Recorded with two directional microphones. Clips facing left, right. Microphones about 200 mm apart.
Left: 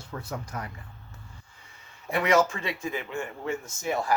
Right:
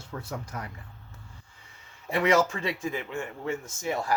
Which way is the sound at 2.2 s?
30° right (ahead or behind).